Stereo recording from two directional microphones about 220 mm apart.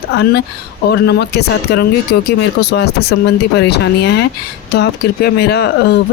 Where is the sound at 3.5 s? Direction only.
50° left (ahead or behind).